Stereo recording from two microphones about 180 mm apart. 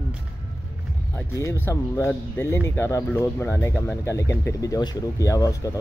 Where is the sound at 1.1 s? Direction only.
15° left (ahead or behind).